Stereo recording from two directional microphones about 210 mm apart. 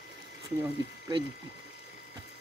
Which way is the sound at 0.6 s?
20° right (ahead or behind).